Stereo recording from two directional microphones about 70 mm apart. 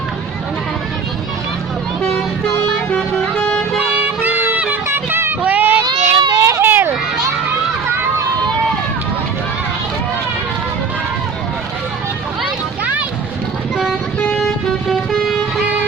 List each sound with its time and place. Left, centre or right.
2.0 s vehicle: centre
3.8 s music: right
4.9 s a sound: right
5.4 s child singing: right
5.8 s baby cry: right
6.6 s a sound: right
12.8 s a sound: right
14.3 s vehicle: centre
15.6 s music: right